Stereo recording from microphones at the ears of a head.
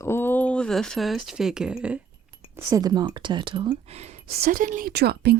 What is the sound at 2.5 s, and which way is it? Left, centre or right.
Speech, right.